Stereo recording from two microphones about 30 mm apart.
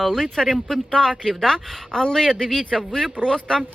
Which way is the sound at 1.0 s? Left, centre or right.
Centre.